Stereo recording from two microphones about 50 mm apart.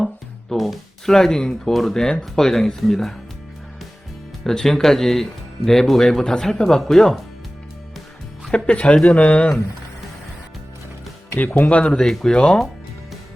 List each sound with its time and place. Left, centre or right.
0.5 s speech: centre
4.4 s speech: centre
8.5 s speech: left
11.3 s speech: left
11.8 s speech: centre